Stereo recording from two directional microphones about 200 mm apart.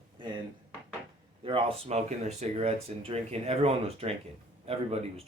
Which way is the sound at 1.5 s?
25° right (ahead or behind).